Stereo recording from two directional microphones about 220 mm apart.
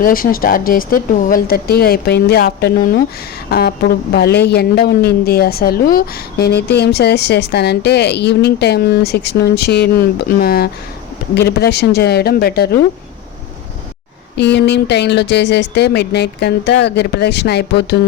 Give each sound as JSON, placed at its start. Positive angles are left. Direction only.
{"t": 0.0, "sound": "speech", "side_deg": 40}
{"t": 14.3, "sound": "speech", "side_deg": 50}